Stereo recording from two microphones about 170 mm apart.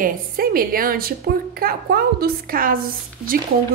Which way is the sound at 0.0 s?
60° right (ahead or behind).